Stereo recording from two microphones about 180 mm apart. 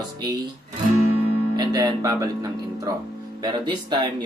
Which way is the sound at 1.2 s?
25° right (ahead or behind).